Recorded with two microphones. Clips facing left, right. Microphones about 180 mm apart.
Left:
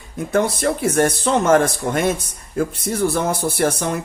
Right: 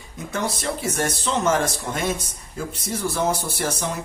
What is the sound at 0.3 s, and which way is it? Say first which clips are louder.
Speech: left 8 dB; 55° left (ahead or behind).